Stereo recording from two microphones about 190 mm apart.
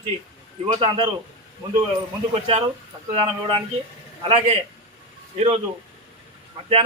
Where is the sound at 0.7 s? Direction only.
30° right (ahead or behind).